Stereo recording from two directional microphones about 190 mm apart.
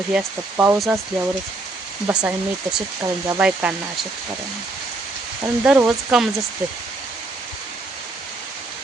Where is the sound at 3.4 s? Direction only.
5° right (ahead or behind).